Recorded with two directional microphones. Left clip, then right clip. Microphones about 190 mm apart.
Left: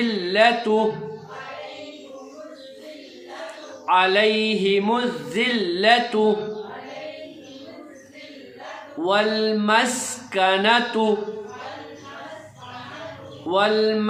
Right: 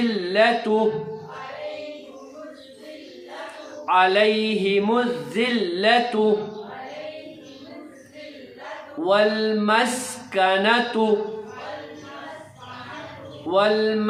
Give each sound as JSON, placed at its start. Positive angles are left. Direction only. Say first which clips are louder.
{"t": 0.0, "sound": "speech", "louder": "left 1 dB", "side_deg": 15}
{"t": 3.8, "sound": "speech", "louder": "even", "side_deg": 15}
{"t": 9.0, "sound": "speech", "louder": "right 1 dB", "side_deg": 15}
{"t": 13.5, "sound": "speech", "louder": "even", "side_deg": 15}